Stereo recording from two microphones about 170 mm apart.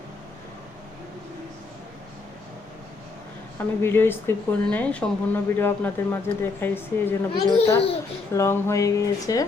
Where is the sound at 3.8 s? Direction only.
15° left (ahead or behind).